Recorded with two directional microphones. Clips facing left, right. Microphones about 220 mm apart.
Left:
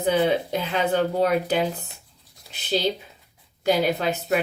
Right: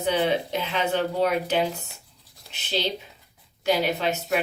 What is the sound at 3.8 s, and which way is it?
Speech, 45° left (ahead or behind).